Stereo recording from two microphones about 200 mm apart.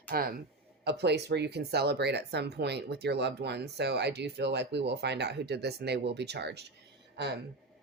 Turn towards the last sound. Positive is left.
turn(degrees=-55)  # may be behind; listen again after turning